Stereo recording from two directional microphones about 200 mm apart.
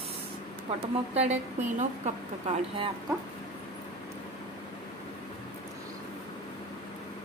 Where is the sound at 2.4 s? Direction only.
25° right (ahead or behind).